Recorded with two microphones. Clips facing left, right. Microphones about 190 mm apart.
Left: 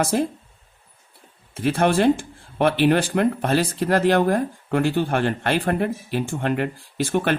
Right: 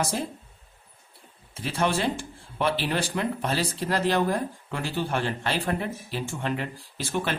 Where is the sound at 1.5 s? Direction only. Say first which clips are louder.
Left 7 dB; 55° left (ahead or behind).